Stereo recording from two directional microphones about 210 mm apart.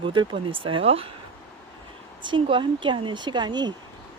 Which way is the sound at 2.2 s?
25° right (ahead or behind).